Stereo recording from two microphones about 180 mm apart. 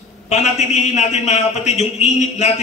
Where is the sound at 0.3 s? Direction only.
40° left (ahead or behind).